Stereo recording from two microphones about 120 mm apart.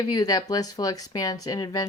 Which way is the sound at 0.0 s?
30° left (ahead or behind).